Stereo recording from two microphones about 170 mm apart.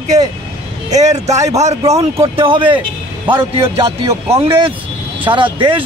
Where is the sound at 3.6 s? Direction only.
20° right (ahead or behind).